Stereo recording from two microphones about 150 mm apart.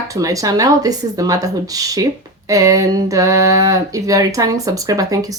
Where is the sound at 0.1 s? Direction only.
20° right (ahead or behind).